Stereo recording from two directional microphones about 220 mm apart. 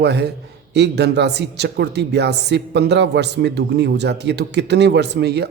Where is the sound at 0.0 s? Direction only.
50° right (ahead or behind).